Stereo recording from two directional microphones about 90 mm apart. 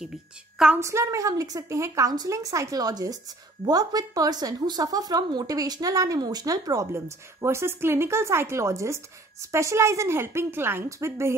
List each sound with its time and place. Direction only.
0.7 s a woman's voice: 35° right (ahead or behind)